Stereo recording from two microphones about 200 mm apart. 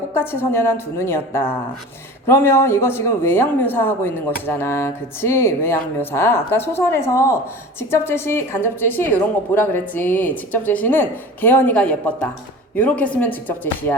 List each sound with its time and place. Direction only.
0.1 s speech: 10° left (ahead or behind)